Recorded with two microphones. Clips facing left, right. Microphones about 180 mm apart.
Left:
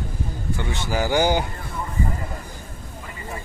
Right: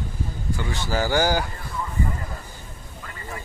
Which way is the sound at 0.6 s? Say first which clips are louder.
Even; 15° left (ahead or behind).